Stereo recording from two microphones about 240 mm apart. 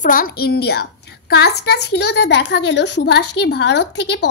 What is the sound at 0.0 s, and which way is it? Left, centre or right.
A woman's voice, left.